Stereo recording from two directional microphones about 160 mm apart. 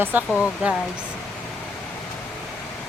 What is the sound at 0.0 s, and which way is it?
Speech, 10° right (ahead or behind).